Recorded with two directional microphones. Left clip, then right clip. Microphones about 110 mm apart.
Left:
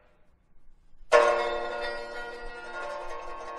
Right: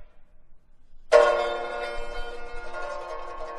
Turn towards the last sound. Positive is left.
turn(degrees=30)  # may be behind; listen again after turning